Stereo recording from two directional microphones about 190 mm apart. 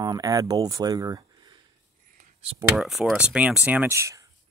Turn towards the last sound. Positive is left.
turn(degrees=-15)  # may be behind; listen again after turning